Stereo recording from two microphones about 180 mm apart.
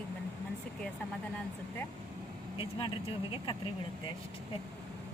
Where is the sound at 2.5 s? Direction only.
30° left (ahead or behind).